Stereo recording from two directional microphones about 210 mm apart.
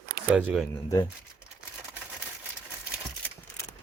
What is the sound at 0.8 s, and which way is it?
Speech, 15° left (ahead or behind).